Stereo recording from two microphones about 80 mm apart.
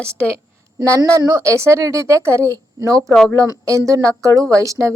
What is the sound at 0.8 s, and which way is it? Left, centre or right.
Speech, right.